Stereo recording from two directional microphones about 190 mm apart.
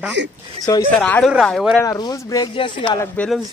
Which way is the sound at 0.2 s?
65° right (ahead or behind).